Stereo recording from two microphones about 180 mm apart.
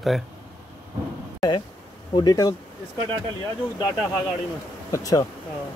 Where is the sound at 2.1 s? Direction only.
20° left (ahead or behind).